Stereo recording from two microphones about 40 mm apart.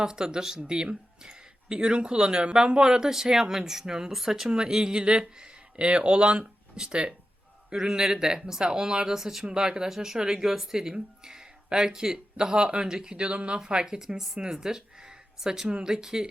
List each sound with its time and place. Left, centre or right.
0.0 s speech: centre